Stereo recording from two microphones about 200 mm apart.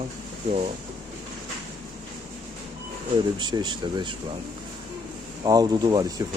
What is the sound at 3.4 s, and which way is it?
Speech, 20° right (ahead or behind).